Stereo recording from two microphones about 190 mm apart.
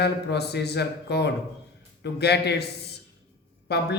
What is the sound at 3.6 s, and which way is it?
Speech, 60° left (ahead or behind).